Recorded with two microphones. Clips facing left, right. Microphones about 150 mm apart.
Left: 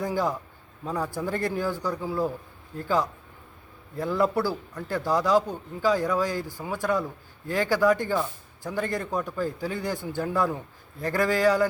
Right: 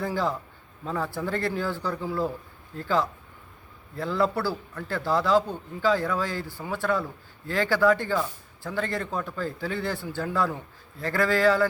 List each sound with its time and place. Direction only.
0.0 s speech: 15° left (ahead or behind)